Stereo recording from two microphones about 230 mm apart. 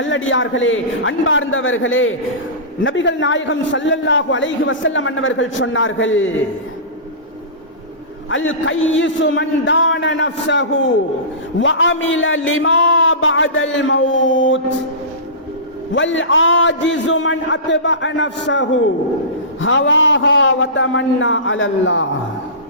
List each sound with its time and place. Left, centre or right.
0.0 s a man's voice: left
8.3 s a man's voice: left
16.0 s a man's voice: left